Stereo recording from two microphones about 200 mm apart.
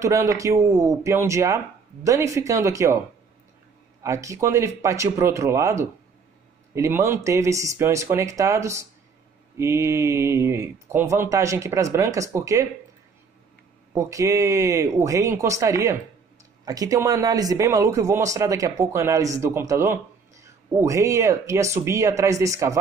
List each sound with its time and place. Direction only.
0.0 s speech: 15° right (ahead or behind)
4.0 s speech: 15° right (ahead or behind)
13.9 s speech: 15° right (ahead or behind)